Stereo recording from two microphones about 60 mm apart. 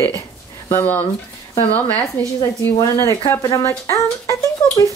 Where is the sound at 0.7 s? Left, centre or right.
Left.